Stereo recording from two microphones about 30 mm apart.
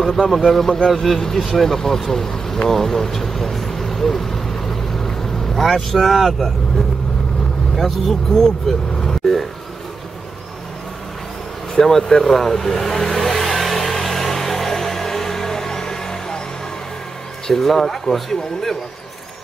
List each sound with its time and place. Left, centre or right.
0.1 s speech: centre
2.7 s vehicle: centre
7.7 s speech: centre
8.3 s speech: centre
11.8 s vehicle: centre
17.5 s speech: centre